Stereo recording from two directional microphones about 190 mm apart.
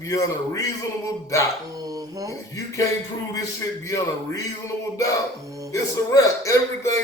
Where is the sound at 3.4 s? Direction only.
15° left (ahead or behind).